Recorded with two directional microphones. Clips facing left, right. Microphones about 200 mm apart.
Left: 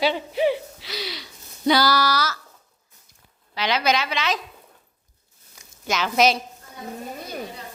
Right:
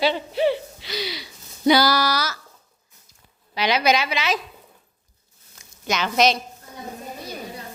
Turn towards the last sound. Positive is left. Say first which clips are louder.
# even
turn(degrees=5)  # may be behind; listen again after turning